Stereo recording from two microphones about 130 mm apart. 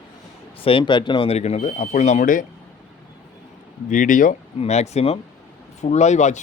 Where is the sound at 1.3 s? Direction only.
60° left (ahead or behind); by 2.5 s 90° left.